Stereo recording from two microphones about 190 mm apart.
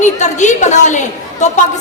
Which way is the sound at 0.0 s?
40° left (ahead or behind).